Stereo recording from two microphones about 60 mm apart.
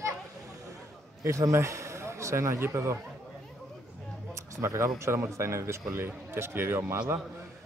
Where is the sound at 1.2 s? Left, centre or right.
Right.